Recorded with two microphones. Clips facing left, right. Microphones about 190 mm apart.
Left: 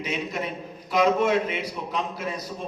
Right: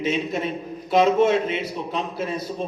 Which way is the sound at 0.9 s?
25° right (ahead or behind).